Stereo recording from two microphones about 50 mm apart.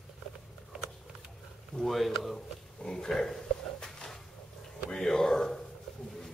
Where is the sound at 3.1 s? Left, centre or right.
Centre.